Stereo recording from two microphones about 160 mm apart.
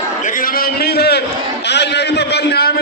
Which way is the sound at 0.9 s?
90° left.